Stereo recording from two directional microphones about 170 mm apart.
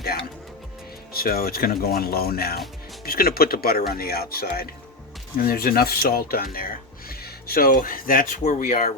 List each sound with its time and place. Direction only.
1.1 s speech: 60° left (ahead or behind)